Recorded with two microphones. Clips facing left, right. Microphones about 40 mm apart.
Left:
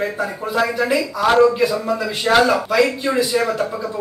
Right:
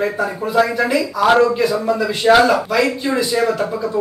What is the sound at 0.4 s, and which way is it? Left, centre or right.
Speech, centre.